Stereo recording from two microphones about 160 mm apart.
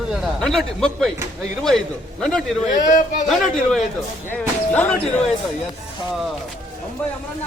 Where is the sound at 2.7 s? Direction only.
55° left (ahead or behind).